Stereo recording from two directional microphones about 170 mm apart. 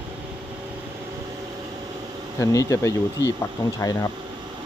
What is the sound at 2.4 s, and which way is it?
Speech, 20° left (ahead or behind).